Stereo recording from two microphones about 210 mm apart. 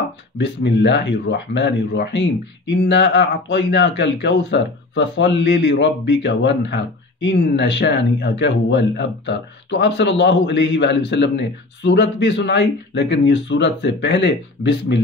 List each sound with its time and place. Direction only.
0.4 s speech: 55° left (ahead or behind)